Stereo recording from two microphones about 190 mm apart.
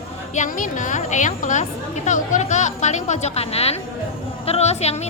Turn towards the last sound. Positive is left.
turn(degrees=35)  # may be behind; listen again after turning